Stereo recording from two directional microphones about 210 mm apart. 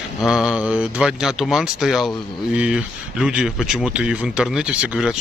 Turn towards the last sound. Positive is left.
turn(degrees=-5)  # may be behind; listen again after turning